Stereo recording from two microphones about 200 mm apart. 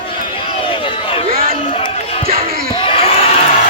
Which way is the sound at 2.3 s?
45° right (ahead or behind).